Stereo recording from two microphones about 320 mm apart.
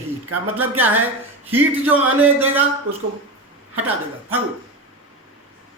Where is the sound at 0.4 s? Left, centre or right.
Centre.